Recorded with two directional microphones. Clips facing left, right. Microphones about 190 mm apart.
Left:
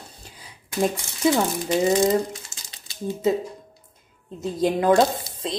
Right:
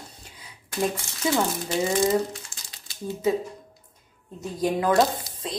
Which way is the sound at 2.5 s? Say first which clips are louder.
Left 1 dB; 20° left (ahead or behind).